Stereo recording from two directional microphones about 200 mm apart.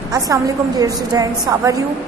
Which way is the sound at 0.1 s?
20° right (ahead or behind).